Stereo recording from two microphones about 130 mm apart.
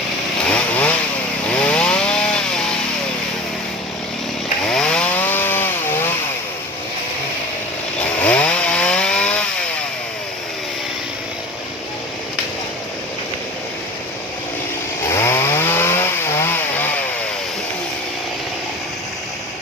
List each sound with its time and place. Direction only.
0.4 s chainsaw: 10° left (ahead or behind)
4.7 s chainsaw: 5° left (ahead or behind)
8.2 s chainsaw: 10° left (ahead or behind)
15.1 s chainsaw: 20° left (ahead or behind)